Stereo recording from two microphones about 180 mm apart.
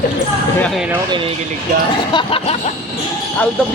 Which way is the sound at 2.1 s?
30° left (ahead or behind).